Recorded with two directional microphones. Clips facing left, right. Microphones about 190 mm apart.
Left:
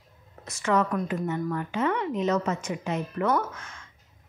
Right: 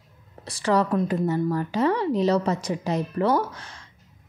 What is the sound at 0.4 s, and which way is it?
A woman's voice, 35° right (ahead or behind).